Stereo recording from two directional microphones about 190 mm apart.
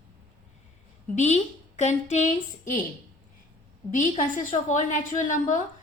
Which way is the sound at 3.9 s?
45° left (ahead or behind).